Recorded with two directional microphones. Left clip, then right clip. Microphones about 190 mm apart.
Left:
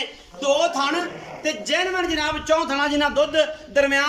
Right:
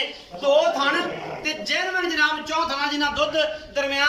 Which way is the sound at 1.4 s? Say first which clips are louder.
Left 3 dB; 40° left (ahead or behind).